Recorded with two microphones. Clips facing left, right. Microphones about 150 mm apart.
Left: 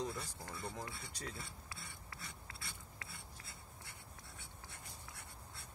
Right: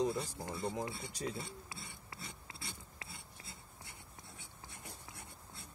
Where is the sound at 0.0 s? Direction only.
20° right (ahead or behind).